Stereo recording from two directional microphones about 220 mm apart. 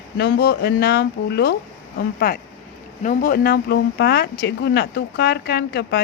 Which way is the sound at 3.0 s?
40° left (ahead or behind).